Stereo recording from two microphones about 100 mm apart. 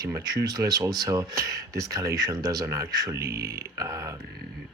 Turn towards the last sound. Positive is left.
turn(degrees=-35)  # may be behind; listen again after turning